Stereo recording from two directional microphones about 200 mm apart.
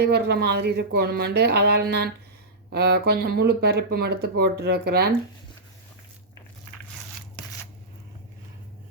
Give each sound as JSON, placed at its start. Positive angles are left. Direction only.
{"t": 0.0, "sound": "speech", "side_deg": -55}